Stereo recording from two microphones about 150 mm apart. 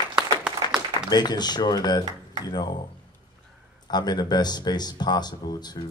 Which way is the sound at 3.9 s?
25° left (ahead or behind).